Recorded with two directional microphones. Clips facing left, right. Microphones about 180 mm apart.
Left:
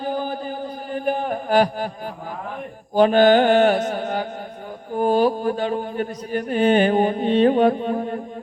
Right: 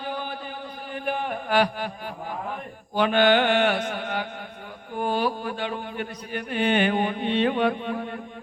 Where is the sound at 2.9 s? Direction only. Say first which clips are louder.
Left 6 dB; 40° left (ahead or behind).